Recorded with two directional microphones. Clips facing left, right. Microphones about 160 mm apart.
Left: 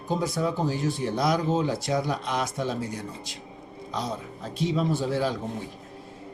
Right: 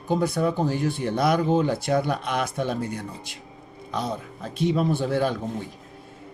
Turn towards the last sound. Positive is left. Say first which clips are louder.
# right 2 dB
turn(degrees=-60)  # may be behind; listen again after turning